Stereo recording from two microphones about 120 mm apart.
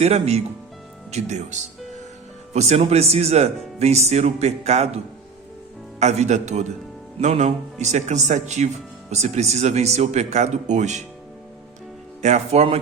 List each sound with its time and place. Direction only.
0.0 s speech: 60° right (ahead or behind)
1.1 s speech: 75° right (ahead or behind)
2.5 s speech: 65° right (ahead or behind)
6.0 s speech: 70° right (ahead or behind)
12.2 s speech: 70° right (ahead or behind)